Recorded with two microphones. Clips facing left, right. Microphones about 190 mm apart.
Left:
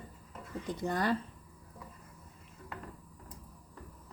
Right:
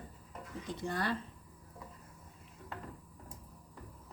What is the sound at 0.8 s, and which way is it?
Speech, 45° left (ahead or behind).